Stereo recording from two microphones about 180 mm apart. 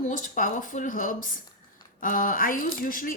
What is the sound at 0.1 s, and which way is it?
Speech, 50° left (ahead or behind).